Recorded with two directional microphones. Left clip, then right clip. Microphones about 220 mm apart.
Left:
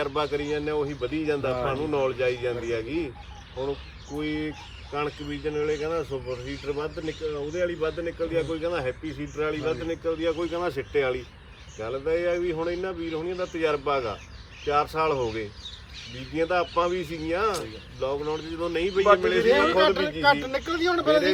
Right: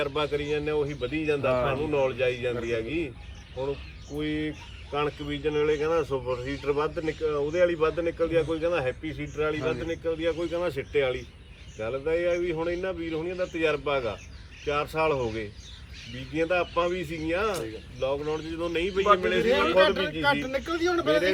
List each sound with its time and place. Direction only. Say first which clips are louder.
0.0 s a man's voice: left 1 dB; 10° left (ahead or behind)
4.2 s speech: even; 10° left (ahead or behind); by 6.6 s 15° right (ahead or behind)
6.7 s a man's voice: right 4 dB; 25° right (ahead or behind); by 15.3 s 10° left (ahead or behind)
16.3 s a man's voice: left 1 dB; 10° left (ahead or behind)
19.5 s speech: left 1 dB; 30° left (ahead or behind)